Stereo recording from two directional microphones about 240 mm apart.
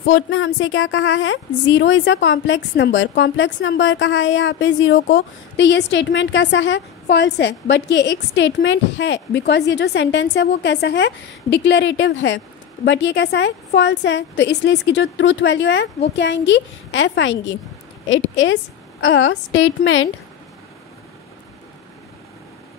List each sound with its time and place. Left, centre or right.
0.0 s a woman's voice: left